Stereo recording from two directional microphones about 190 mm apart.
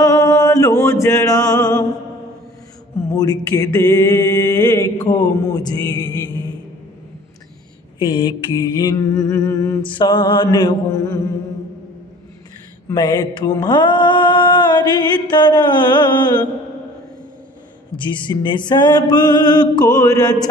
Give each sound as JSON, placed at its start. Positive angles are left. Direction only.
{"t": 0.0, "sound": "chant", "side_deg": 20}
{"t": 1.0, "sound": "music", "side_deg": 15}
{"t": 3.2, "sound": "mantra", "side_deg": 20}
{"t": 8.0, "sound": "mantra", "side_deg": 25}
{"t": 12.8, "sound": "mantra", "side_deg": 20}
{"t": 18.0, "sound": "mantra", "side_deg": 25}